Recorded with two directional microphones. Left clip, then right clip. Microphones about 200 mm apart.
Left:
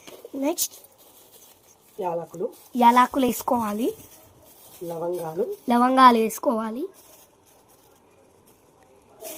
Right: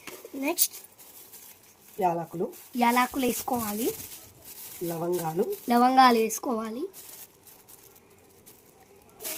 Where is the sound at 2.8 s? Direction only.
10° left (ahead or behind).